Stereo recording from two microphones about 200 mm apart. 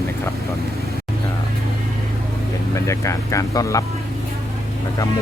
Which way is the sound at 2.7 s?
15° left (ahead or behind).